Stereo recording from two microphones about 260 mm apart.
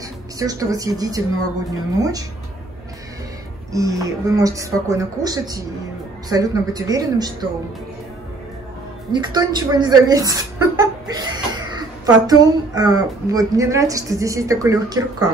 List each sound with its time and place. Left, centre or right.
0.4 s a woman's voice: centre
3.7 s a woman's voice: centre
9.1 s a woman's voice: centre